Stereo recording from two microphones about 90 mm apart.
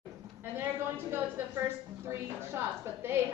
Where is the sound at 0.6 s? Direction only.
25° right (ahead or behind).